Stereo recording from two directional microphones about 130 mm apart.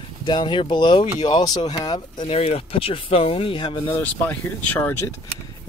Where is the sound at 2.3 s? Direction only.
50° left (ahead or behind).